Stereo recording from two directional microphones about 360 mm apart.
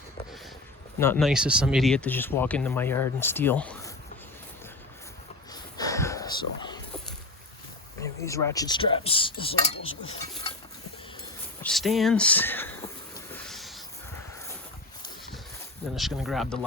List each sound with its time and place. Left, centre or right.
0.9 s speech: centre
5.7 s a sound: centre
8.2 s speech: centre
9.7 s dishes: left
11.6 s speech: centre
13.3 s a sound: centre
16.0 s speech: centre